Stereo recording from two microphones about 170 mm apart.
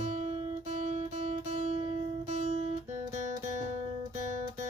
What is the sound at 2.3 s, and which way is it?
Guitar, 45° right (ahead or behind).